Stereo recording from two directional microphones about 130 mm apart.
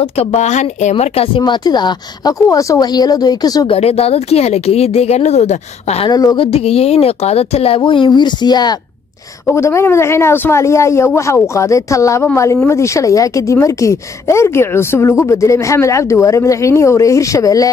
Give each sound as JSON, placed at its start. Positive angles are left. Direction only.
{"t": 0.0, "sound": "speech", "side_deg": 55}
{"t": 1.4, "sound": "a woman's voice", "side_deg": 30}
{"t": 3.6, "sound": "speech", "side_deg": 50}
{"t": 6.0, "sound": "a woman's voice", "side_deg": 30}
{"t": 6.4, "sound": "speech", "side_deg": 50}
{"t": 9.5, "sound": "speech", "side_deg": 20}